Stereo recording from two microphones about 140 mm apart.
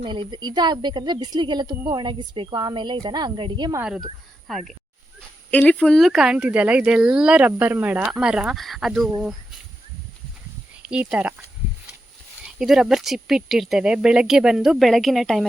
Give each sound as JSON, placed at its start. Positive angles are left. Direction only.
{"t": 0.0, "sound": "a woman's voice", "side_deg": -35}
{"t": 4.4, "sound": "speech", "side_deg": 0}
{"t": 10.8, "sound": "speech", "side_deg": -10}
{"t": 12.5, "sound": "speech", "side_deg": -5}